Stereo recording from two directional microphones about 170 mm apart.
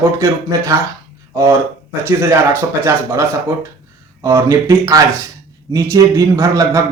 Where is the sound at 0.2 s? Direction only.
20° right (ahead or behind).